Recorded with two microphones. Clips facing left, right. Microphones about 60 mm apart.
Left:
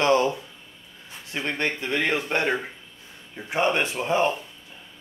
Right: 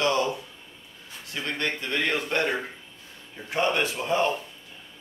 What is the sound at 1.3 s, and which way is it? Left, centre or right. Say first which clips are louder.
Speech: left 3 dB; left.